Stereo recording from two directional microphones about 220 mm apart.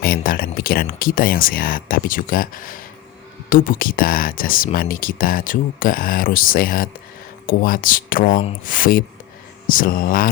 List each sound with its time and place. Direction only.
0.0 s speech: 40° left (ahead or behind)